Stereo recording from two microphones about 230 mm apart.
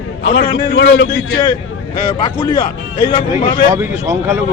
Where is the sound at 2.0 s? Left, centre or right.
Centre.